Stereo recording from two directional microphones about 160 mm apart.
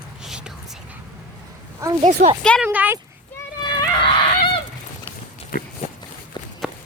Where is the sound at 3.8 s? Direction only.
30° left (ahead or behind).